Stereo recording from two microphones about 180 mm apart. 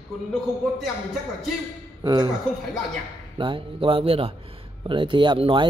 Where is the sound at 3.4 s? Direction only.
30° right (ahead or behind).